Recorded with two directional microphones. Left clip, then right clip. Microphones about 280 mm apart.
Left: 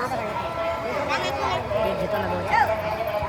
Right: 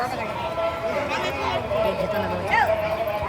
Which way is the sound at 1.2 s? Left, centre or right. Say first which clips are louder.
Even; left.